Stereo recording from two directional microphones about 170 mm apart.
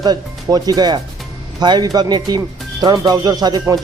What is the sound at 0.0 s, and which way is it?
Speech, 25° right (ahead or behind).